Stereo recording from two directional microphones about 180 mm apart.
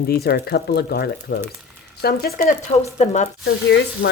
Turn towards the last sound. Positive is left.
turn(degrees=75)  # may be behind; listen again after turning